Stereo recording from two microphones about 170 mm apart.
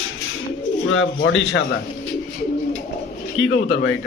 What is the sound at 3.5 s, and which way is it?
Speech, 90° left.